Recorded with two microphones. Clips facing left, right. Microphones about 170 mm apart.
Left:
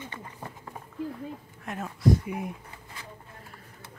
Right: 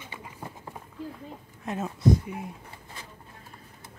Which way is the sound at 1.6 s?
20° right (ahead or behind).